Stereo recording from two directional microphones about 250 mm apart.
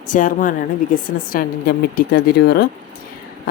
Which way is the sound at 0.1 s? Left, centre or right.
Left.